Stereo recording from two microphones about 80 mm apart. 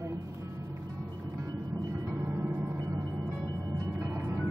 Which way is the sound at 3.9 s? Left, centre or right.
Right.